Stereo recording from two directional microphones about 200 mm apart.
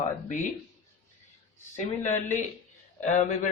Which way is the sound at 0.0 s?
40° left (ahead or behind).